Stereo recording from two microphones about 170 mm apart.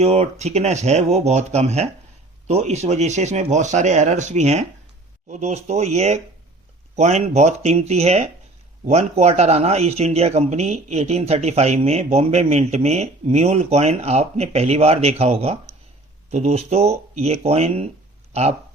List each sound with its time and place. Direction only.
0.0 s speech: 40° right (ahead or behind)